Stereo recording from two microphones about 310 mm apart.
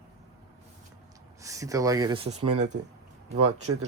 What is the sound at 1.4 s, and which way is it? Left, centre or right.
Speech, centre.